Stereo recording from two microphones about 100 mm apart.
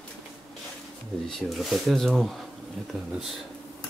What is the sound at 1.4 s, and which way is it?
Speech, centre (ahead or behind).